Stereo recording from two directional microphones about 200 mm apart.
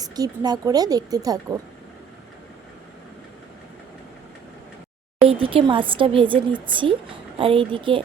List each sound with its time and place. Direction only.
0.0 s speech: 20° right (ahead or behind)
5.2 s speech: 25° right (ahead or behind)